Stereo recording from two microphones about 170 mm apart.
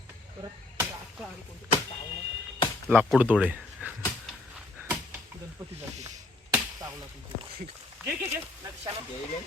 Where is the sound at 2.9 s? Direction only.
10° right (ahead or behind).